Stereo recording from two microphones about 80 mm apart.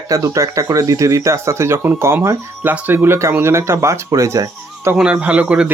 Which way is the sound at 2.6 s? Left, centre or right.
Right.